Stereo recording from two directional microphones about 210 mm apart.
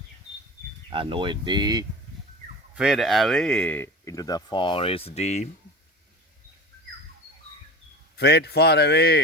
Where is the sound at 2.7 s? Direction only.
Centre (ahead or behind); by 5.5 s 30° left (ahead or behind).